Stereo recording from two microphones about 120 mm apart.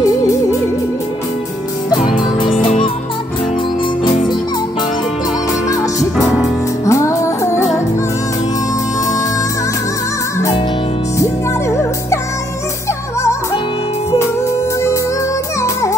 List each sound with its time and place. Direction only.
4.0 s music: 40° left (ahead or behind)
6.1 s music: centre (ahead or behind)
6.9 s music: 25° left (ahead or behind)
11.7 s music: 25° left (ahead or behind)